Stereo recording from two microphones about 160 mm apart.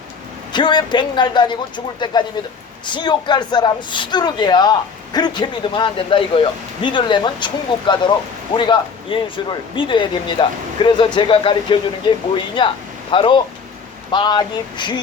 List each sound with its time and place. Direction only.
0.5 s speech: 30° left (ahead or behind)